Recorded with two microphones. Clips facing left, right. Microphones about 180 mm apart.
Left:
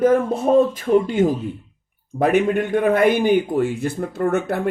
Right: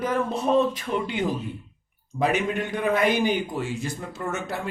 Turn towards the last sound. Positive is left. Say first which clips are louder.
# left 10 dB
turn(degrees=55)  # may be behind; listen again after turning